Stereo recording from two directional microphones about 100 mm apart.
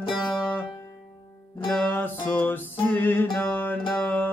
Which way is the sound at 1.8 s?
20° left (ahead or behind).